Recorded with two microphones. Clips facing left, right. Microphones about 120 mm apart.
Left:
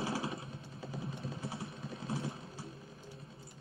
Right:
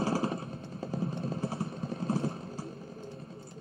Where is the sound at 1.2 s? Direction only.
55° right (ahead or behind).